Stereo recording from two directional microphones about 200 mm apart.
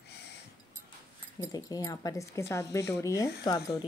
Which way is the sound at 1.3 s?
15° left (ahead or behind).